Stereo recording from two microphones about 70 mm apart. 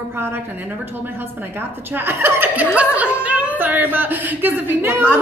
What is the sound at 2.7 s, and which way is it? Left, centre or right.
A woman's voice, centre.